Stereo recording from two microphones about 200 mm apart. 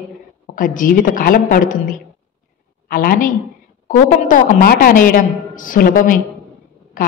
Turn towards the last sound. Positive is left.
turn(degrees=40)  # may be behind; listen again after turning